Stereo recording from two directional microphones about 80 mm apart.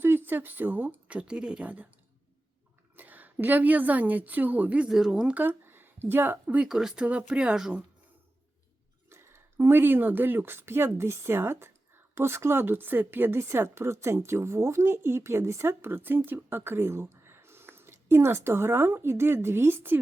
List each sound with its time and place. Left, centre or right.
0.0 s speech: right
2.9 s a woman's voice: right
4.9 s speech: centre
5.3 s speech: right
6.7 s speech: centre
9.0 s speech: right